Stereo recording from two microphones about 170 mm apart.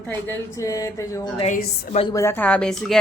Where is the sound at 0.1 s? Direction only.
15° left (ahead or behind).